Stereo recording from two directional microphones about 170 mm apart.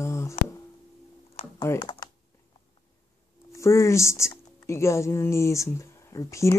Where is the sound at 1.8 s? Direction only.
25° left (ahead or behind).